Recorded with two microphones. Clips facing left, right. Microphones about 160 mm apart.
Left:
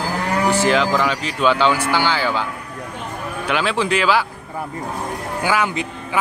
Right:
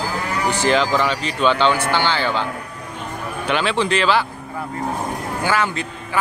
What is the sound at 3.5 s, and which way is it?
Speech, 5° left (ahead or behind).